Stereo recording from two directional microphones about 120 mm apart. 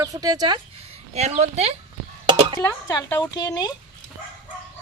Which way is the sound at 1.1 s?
70° right (ahead or behind).